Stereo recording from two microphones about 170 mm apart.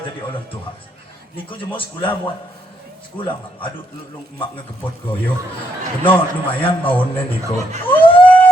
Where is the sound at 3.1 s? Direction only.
10° left (ahead or behind).